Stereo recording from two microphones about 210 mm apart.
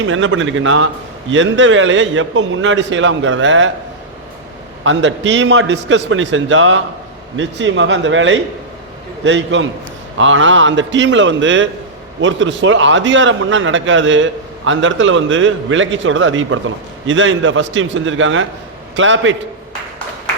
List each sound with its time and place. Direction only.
0.0 s a man's voice: 65° right (ahead or behind)
4.8 s a man's voice: 60° right (ahead or behind)